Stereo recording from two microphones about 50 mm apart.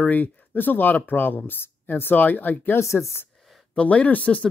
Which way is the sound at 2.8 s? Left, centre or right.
Left.